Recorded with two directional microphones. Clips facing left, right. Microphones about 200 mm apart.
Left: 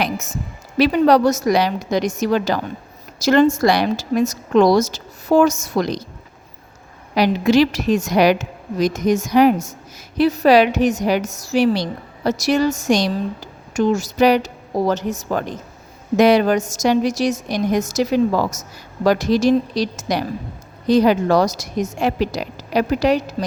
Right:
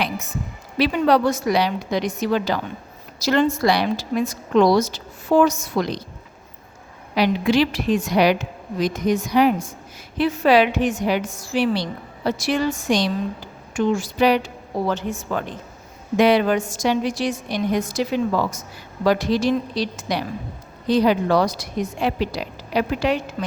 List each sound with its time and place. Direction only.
0.0 s a sound: 45° left (ahead or behind)
0.8 s a woman's voice: 40° left (ahead or behind)
7.2 s a woman's voice: 40° left (ahead or behind)